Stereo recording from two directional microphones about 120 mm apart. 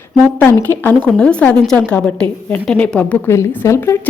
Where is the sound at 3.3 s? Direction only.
25° left (ahead or behind).